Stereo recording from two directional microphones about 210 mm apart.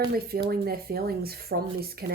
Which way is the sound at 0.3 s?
50° right (ahead or behind).